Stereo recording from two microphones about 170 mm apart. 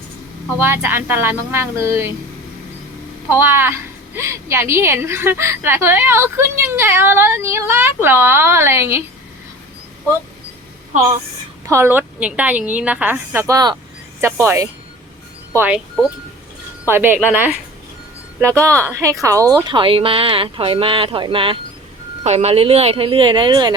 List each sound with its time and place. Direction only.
0.6 s a woman's voice: 15° right (ahead or behind)
3.2 s a woman's voice: 15° right (ahead or behind)
11.6 s a woman's voice: 15° right (ahead or behind)
18.6 s a woman's voice: 15° right (ahead or behind)
19.6 s speech: 30° right (ahead or behind)
22.2 s speech: 40° right (ahead or behind); by 23.7 s 25° right (ahead or behind)